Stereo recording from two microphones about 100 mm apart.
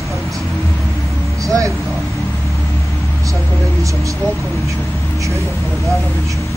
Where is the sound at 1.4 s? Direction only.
35° right (ahead or behind).